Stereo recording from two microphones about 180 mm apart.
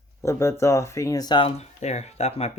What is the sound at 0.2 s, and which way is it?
Speech, 15° left (ahead or behind).